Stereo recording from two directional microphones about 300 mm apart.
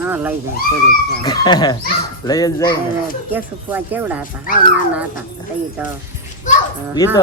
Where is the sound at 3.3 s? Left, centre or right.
Centre.